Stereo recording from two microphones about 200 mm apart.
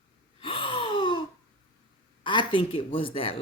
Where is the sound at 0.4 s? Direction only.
25° left (ahead or behind).